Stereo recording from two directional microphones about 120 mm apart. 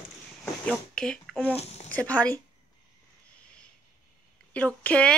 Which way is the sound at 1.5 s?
60° left (ahead or behind).